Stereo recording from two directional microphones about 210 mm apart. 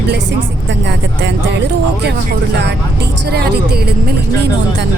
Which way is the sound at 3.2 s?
50° right (ahead or behind).